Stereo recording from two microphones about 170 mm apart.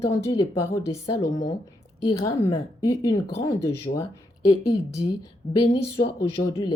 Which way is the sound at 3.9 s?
55° left (ahead or behind).